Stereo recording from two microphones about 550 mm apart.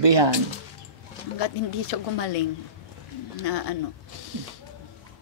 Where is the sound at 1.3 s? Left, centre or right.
Left.